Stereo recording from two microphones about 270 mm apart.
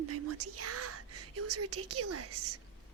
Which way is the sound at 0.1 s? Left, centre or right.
Right.